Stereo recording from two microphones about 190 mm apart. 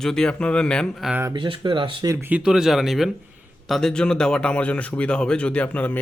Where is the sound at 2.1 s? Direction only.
10° right (ahead or behind); by 6.0 s 10° left (ahead or behind).